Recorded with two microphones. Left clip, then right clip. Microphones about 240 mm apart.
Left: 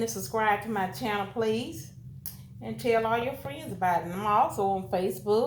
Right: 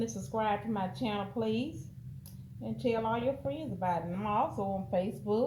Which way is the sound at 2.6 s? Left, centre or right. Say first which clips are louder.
Left 6 dB; centre.